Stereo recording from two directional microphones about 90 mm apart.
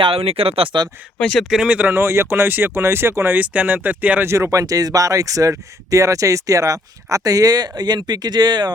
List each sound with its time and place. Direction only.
0.0 s speech: 90° right
1.2 s speech: 10° left (ahead or behind)
1.5 s speech: 10° right (ahead or behind); by 3.3 s 30° right (ahead or behind)
3.3 s speech: 15° right (ahead or behind)
4.3 s speech: 30° right (ahead or behind); by 8.7 s 50° right (ahead or behind)